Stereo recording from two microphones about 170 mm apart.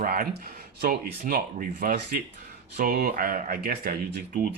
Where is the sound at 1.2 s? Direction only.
55° right (ahead or behind).